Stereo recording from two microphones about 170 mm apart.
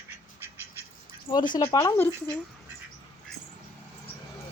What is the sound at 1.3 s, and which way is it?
Speech, 25° left (ahead or behind).